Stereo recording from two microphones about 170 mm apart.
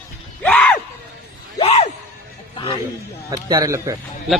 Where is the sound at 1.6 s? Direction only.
40° left (ahead or behind).